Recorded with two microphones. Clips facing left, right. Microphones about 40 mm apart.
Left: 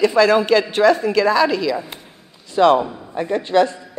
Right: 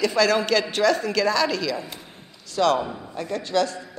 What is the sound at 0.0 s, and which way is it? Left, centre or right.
A woman's voice, centre.